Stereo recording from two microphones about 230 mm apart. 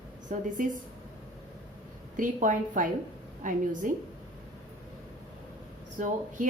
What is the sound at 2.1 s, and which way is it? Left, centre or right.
Speech, right.